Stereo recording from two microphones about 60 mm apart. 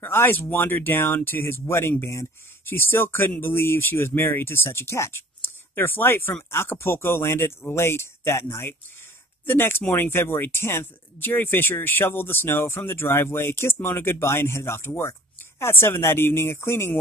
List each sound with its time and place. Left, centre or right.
0.0 s speech: left